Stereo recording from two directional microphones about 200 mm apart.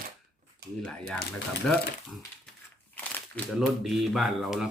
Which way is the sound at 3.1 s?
5° left (ahead or behind).